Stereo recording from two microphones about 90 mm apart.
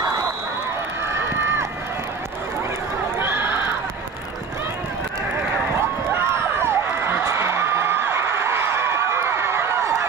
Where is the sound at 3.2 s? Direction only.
25° right (ahead or behind).